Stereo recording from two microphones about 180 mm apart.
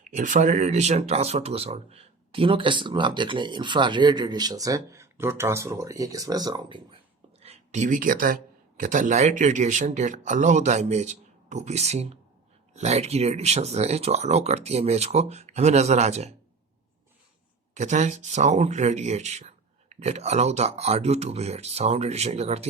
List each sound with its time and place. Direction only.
0.1 s speech: 45° right (ahead or behind); by 6.8 s 25° right (ahead or behind)
7.4 s speech: 40° right (ahead or behind)
17.7 s speech: 40° right (ahead or behind)